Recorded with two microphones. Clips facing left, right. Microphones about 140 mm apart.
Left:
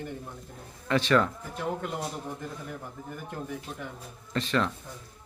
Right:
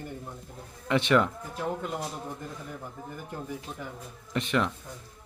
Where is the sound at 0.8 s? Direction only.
20° right (ahead or behind).